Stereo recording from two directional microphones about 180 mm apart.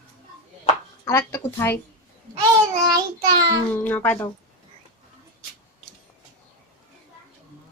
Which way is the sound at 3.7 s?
10° left (ahead or behind).